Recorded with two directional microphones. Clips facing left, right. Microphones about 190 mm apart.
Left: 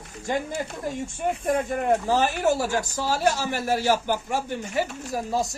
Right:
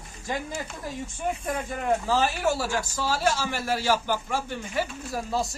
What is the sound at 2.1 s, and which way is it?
Speech, 20° left (ahead or behind).